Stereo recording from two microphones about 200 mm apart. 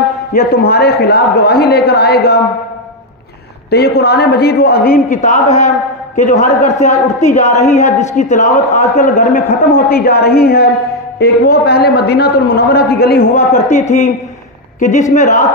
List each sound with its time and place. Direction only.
0.3 s a man's voice: 50° left (ahead or behind)
3.7 s a man's voice: 55° left (ahead or behind)
13.8 s a woman's voice: 35° left (ahead or behind)